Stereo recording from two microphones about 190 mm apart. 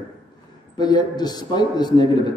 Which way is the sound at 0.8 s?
20° left (ahead or behind).